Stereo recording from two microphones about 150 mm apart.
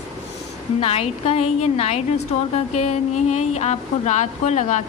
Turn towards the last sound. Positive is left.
turn(degrees=50)  # may be behind; listen again after turning